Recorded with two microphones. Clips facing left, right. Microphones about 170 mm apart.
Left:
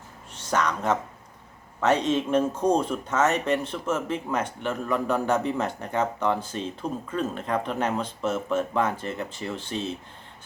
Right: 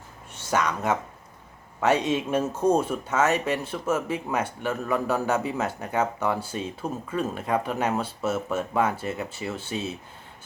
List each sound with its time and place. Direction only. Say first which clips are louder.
0.3 s speech: even; 10° right (ahead or behind)